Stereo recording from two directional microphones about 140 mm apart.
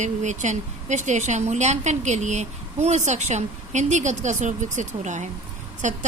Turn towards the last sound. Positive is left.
turn(degrees=-60)  # may be behind; listen again after turning